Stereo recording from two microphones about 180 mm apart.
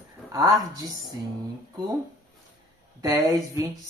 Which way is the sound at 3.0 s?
20° right (ahead or behind).